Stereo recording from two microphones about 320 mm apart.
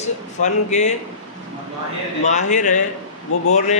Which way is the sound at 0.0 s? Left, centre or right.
Left.